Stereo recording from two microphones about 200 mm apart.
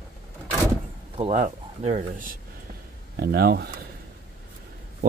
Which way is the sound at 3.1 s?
50° right (ahead or behind).